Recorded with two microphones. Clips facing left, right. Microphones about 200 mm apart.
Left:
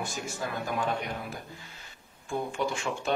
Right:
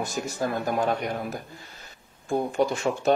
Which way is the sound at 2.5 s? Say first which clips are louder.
Right 7 dB; 40° right (ahead or behind).